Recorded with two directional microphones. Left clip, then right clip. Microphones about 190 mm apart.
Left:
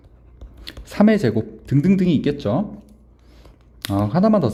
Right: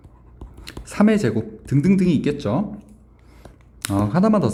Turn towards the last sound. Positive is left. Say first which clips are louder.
# left 1 dB
turn(degrees=15)  # may be behind; listen again after turning